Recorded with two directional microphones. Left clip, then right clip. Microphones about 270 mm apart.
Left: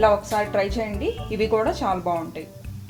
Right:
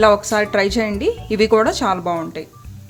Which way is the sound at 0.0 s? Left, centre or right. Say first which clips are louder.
Right 5 dB; right.